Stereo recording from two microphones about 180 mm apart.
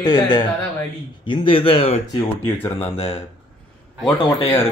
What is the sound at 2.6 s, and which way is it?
Speech, 10° left (ahead or behind).